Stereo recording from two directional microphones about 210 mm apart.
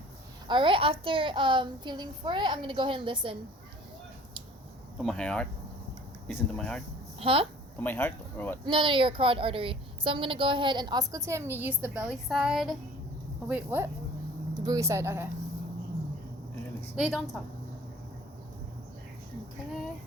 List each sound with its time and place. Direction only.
0.4 s a woman's voice: 25° right (ahead or behind)
4.9 s speech: 5° left (ahead or behind)
7.2 s speech: 25° right (ahead or behind)
7.8 s speech: 10° left (ahead or behind)
8.6 s a woman's voice: 25° right (ahead or behind)
16.9 s speech: centre (ahead or behind)